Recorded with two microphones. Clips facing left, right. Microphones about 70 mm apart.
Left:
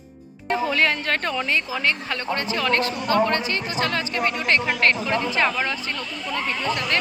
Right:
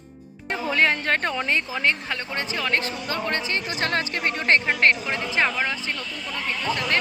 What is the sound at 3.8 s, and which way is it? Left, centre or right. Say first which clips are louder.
A woman's voice: left 3 dB; right.